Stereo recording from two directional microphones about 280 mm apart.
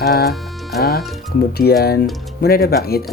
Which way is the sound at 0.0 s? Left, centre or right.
Left.